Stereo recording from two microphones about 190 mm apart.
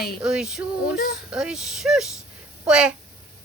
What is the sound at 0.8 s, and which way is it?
Speech, 55° left (ahead or behind).